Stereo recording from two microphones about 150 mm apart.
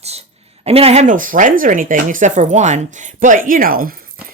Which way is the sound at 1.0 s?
60° right (ahead or behind).